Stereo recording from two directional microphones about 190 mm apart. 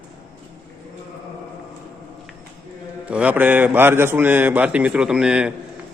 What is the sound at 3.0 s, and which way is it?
A man's voice, 5° right (ahead or behind).